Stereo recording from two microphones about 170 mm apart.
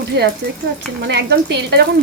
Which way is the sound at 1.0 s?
85° right.